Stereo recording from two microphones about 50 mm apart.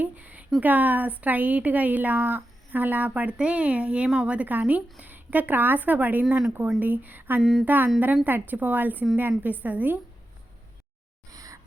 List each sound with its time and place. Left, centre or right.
0.0 s speech: right
4.4 s speech: right